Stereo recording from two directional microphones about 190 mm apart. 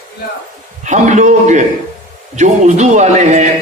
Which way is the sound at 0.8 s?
40° right (ahead or behind).